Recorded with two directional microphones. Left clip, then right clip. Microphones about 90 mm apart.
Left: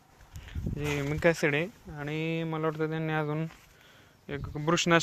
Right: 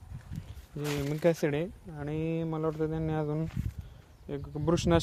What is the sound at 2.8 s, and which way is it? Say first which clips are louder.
Speech: left 1 dB; 15° right (ahead or behind).